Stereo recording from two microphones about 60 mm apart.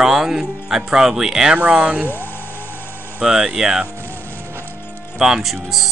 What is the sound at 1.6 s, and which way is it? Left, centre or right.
Speech, centre.